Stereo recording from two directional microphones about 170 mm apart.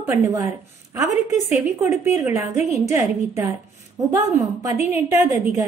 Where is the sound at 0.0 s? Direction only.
15° right (ahead or behind).